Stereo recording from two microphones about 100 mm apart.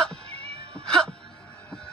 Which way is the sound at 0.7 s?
10° left (ahead or behind).